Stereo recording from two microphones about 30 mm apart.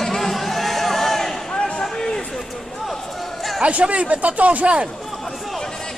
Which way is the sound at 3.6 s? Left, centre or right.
Right.